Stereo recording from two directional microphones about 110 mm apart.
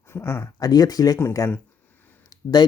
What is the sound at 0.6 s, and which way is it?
Speech, 35° left (ahead or behind).